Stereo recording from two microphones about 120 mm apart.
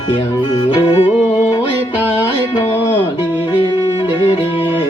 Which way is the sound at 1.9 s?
15° right (ahead or behind).